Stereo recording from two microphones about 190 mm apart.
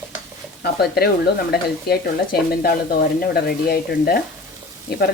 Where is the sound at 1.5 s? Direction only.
55° left (ahead or behind).